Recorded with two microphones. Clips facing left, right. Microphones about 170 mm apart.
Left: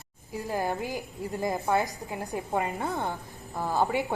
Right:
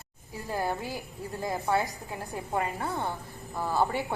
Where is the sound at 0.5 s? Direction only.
15° left (ahead or behind).